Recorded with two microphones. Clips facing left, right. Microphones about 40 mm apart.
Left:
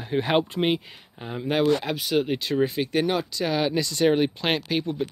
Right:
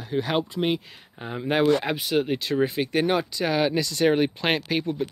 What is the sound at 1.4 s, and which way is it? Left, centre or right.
Speech, centre.